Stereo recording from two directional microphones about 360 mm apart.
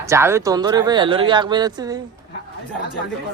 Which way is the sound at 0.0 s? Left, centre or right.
Centre.